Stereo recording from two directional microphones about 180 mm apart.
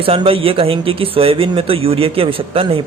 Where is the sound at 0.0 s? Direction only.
30° right (ahead or behind).